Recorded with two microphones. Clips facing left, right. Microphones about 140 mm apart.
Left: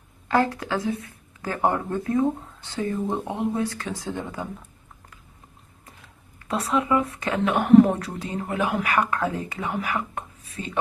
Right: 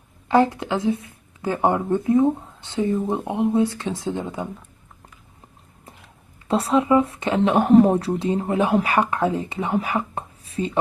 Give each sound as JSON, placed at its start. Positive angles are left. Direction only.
{"t": 0.3, "sound": "speech", "side_deg": -20}
{"t": 6.4, "sound": "speech", "side_deg": -30}